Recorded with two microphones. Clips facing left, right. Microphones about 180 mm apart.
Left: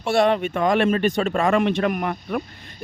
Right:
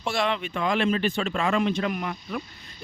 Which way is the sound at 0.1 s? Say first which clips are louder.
Left 8 dB; 50° left (ahead or behind).